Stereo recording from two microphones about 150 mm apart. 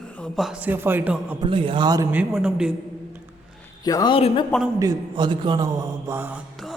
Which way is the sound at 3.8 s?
25° left (ahead or behind).